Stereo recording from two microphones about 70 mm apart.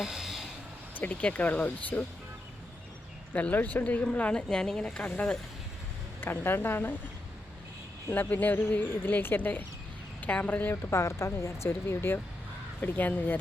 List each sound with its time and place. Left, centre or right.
0.0 s a sound: centre
0.9 s speech: left
3.3 s speech: left
6.1 s speech: left
8.1 s speech: left
10.8 s speech: left